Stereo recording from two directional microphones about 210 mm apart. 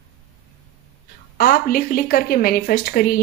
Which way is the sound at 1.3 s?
45° left (ahead or behind).